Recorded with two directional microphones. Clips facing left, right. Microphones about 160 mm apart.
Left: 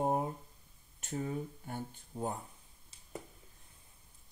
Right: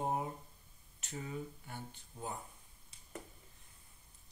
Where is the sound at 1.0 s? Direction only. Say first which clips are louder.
Left 6 dB; 45° left (ahead or behind).